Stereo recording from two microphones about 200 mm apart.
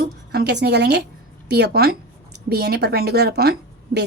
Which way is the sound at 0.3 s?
55° right (ahead or behind).